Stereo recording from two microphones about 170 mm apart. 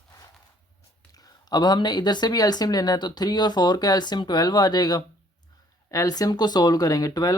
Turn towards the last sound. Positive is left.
turn(degrees=20)  # may be behind; listen again after turning